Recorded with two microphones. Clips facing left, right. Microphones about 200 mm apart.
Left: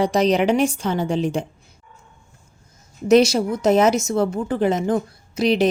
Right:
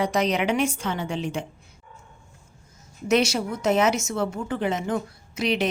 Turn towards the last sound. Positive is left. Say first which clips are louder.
# left 6 dB
turn(degrees=35)  # may be behind; listen again after turning